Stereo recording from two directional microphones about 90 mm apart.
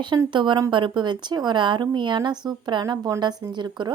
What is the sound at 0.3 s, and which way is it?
A woman's voice, 60° right (ahead or behind).